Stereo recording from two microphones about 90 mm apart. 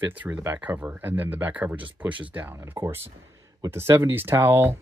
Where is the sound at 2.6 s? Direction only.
30° right (ahead or behind).